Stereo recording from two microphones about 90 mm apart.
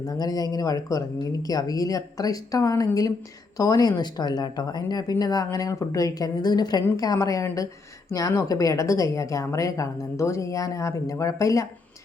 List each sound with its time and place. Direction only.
0.0 s a woman's voice: 45° left (ahead or behind)